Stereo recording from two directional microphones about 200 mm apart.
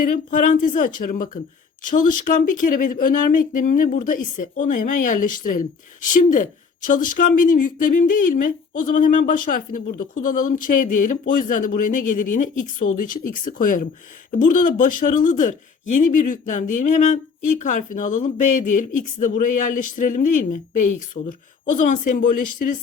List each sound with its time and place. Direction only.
0.0 s speech: 40° left (ahead or behind)